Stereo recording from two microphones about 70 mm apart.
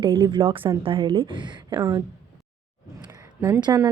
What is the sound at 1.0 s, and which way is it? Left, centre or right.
Speech, right.